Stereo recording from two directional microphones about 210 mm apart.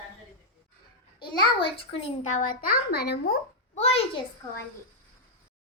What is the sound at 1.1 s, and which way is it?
A child's voice, 25° left (ahead or behind).